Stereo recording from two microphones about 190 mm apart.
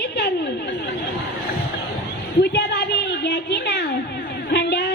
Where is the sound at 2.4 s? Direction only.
60° left (ahead or behind).